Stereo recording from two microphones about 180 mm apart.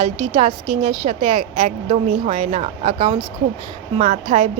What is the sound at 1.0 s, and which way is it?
A woman's voice, 40° right (ahead or behind).